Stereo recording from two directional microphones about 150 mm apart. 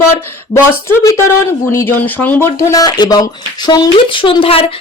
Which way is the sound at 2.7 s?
25° left (ahead or behind).